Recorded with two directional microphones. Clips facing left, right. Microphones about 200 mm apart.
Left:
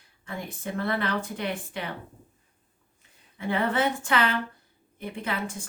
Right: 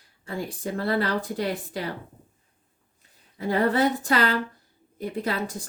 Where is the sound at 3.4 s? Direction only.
35° right (ahead or behind).